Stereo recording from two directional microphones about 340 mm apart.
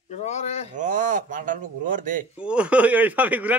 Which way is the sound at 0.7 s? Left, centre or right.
Right.